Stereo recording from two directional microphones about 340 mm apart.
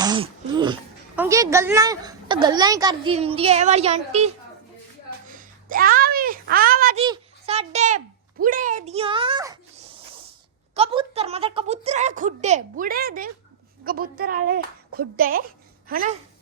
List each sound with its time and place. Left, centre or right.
0.0 s speech: centre
5.3 s a sound: right
7.1 s a child's voice: centre
10.8 s speech: centre